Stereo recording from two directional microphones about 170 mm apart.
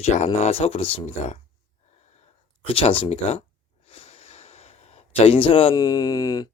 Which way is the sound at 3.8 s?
40° left (ahead or behind).